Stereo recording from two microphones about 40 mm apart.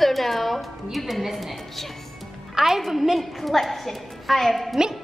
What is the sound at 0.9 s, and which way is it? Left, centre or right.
A man's voice, centre.